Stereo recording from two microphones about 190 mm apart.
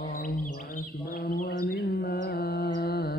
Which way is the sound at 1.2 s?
55° left (ahead or behind).